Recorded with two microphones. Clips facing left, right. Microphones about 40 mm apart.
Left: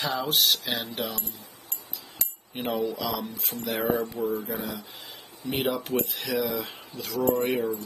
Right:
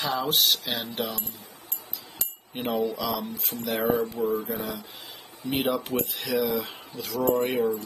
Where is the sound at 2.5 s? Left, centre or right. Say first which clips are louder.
Right 1 dB; centre.